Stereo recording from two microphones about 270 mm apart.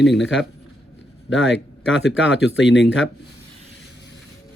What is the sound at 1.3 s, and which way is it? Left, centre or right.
Speech, left.